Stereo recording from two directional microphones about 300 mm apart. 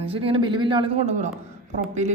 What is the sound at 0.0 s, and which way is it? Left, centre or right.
Speech, centre.